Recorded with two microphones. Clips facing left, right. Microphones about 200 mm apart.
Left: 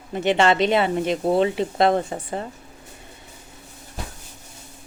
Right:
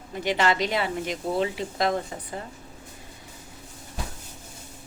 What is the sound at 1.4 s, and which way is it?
Speech, 25° left (ahead or behind).